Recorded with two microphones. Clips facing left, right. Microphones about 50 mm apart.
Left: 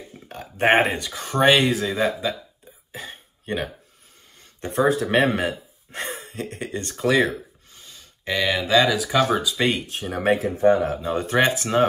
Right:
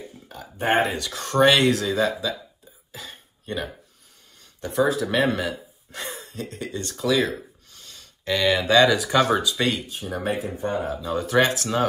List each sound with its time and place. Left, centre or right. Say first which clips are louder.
0.3 s a sound: left 4 dB; left
0.9 s speech: right 2 dB; centre
2.9 s throat clearing: left 3 dB; left
4.6 s speech: left 1 dB; left
7.8 s speech: even; centre
9.8 s speech: left 2 dB; left
10.2 s speech: left 10 dB; left
11.0 s speech: even; left